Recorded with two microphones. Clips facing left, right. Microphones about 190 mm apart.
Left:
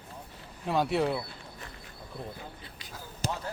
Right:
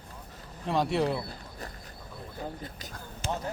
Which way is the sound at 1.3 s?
40° right (ahead or behind).